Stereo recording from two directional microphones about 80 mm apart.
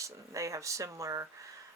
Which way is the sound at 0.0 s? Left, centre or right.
Right.